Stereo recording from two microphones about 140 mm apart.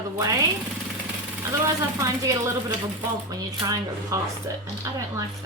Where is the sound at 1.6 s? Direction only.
20° right (ahead or behind).